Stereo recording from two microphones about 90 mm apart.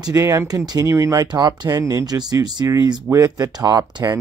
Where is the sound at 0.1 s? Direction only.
35° right (ahead or behind).